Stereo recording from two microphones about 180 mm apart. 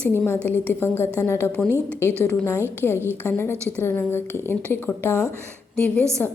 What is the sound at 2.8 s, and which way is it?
A woman's voice, 15° left (ahead or behind).